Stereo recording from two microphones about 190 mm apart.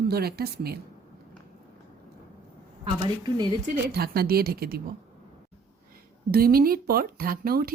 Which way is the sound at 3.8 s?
55° right (ahead or behind).